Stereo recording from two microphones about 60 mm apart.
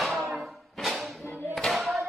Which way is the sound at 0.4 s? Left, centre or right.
Centre.